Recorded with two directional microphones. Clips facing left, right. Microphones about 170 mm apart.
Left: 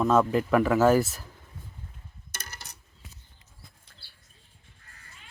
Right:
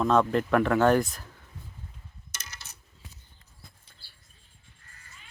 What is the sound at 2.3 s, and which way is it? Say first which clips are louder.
Coin: left 3 dB; 55° left (ahead or behind).